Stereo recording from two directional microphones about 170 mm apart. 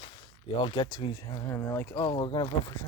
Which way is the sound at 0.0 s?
30° left (ahead or behind).